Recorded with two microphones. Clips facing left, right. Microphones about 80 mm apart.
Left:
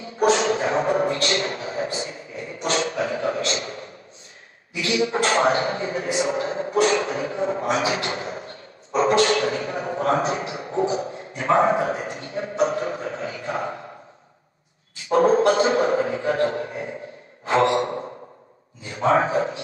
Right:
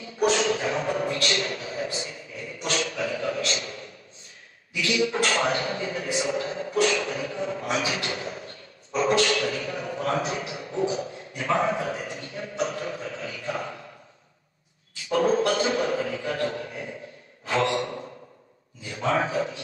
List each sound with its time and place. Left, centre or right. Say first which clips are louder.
0.0 s a sound: left 4 dB; left
4.7 s a man's voice: left 2 dB; left
15.0 s a man's voice: left 5 dB; left